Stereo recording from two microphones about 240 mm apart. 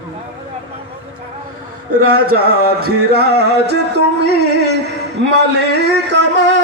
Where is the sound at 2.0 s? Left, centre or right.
Right.